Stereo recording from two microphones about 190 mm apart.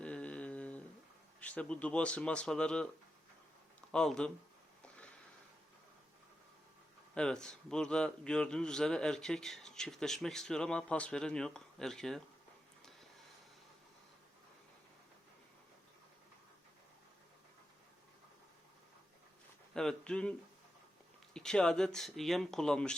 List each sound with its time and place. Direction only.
0.0 s mantra: 5° left (ahead or behind)
1.4 s a man's voice: 5° left (ahead or behind)
3.9 s a man's voice: 5° left (ahead or behind)
7.1 s a man's voice: 5° left (ahead or behind)
19.7 s a man's voice: 5° left (ahead or behind)
21.3 s a man's voice: 5° left (ahead or behind)